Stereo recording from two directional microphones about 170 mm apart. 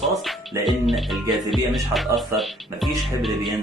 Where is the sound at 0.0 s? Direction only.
Centre (ahead or behind).